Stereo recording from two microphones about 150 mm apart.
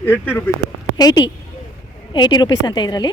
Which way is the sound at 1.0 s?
25° left (ahead or behind).